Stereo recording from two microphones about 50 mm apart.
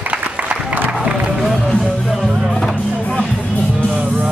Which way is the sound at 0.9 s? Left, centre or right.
Centre.